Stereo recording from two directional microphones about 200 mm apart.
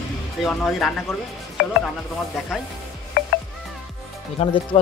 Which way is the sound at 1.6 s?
55° left (ahead or behind).